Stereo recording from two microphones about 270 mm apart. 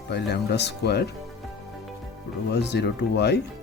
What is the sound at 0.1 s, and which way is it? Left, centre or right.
Speech, left.